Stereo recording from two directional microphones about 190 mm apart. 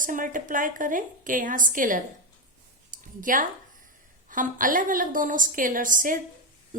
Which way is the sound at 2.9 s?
45° right (ahead or behind).